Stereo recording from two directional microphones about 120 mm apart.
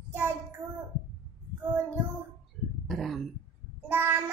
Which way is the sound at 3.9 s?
15° right (ahead or behind).